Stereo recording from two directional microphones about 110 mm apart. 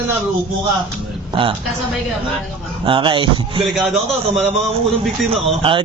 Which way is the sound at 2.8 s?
50° right (ahead or behind).